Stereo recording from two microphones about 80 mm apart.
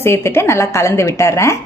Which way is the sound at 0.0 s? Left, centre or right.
Left.